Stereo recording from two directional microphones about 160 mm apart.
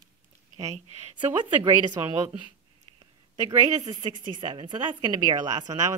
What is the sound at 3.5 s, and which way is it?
Speech, 25° right (ahead or behind).